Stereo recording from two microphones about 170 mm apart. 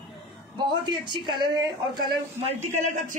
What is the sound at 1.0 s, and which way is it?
Speech, 25° right (ahead or behind).